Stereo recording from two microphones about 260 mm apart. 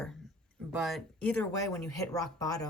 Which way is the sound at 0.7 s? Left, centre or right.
Centre.